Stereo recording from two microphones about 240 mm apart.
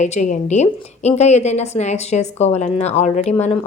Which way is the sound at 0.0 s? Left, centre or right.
Left.